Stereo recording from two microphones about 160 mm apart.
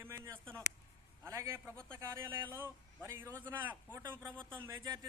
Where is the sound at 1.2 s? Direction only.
15° right (ahead or behind).